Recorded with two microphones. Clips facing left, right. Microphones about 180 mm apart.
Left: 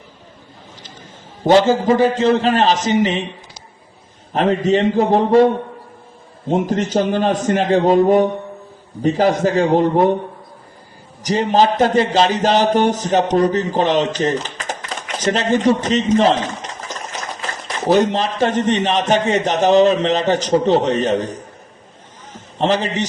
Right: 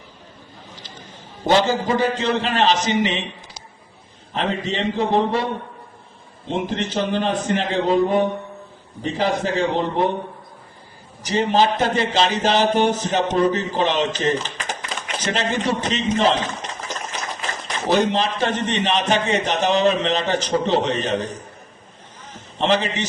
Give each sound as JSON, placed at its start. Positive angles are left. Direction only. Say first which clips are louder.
{"t": 1.5, "sound": "speech", "louder": "left 6 dB", "side_deg": 45}
{"t": 4.4, "sound": "speech", "louder": "left 8 dB", "side_deg": 45}
{"t": 6.5, "sound": "speech", "louder": "left 6 dB", "side_deg": 45}
{"t": 11.2, "sound": "speech", "louder": "left 3 dB", "side_deg": 40}
{"t": 17.8, "sound": "speech", "louder": "left 4 dB", "side_deg": 45}
{"t": 22.5, "sound": "speech", "louder": "left 2 dB", "side_deg": 45}